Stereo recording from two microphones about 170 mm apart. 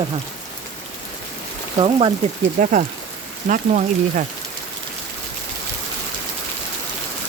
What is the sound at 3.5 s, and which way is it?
Speech, 50° right (ahead or behind).